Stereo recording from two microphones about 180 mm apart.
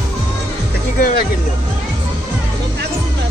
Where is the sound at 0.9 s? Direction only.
55° left (ahead or behind).